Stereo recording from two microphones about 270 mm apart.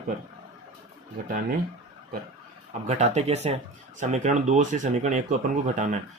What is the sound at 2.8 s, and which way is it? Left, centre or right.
Speech, right.